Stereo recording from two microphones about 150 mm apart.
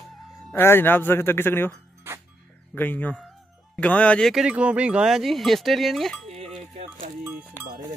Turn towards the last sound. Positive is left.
turn(degrees=-45)  # may be behind; listen again after turning